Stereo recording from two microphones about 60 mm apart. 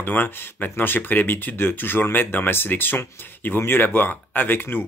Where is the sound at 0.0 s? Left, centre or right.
Left.